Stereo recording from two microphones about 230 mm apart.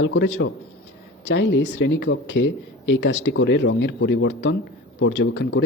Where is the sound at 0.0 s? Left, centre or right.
Left.